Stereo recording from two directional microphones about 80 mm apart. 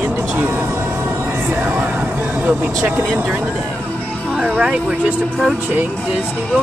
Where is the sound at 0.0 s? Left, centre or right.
Right.